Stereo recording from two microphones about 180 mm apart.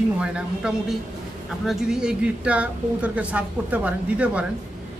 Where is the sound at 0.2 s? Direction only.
5° right (ahead or behind).